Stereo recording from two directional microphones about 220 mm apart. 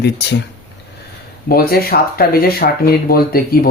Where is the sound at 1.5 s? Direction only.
45° left (ahead or behind).